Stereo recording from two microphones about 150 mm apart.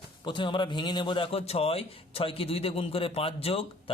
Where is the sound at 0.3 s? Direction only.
30° left (ahead or behind).